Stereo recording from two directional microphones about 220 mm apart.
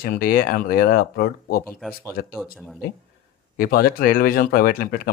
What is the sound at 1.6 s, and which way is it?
Speech, 10° left (ahead or behind).